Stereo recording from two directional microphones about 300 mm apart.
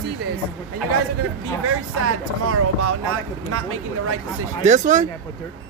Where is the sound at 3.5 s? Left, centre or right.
Right.